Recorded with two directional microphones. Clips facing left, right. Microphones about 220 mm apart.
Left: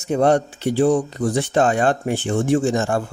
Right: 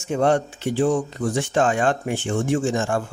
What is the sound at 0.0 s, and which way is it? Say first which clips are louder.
Speech: left 3 dB; 35° left (ahead or behind).